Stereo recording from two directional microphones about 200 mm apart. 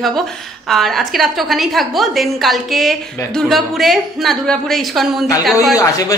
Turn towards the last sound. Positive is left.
turn(degrees=15)  # may be behind; listen again after turning